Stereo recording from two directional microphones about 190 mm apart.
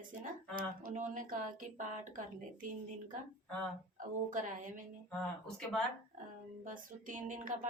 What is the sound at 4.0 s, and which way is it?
Speech, 45° right (ahead or behind).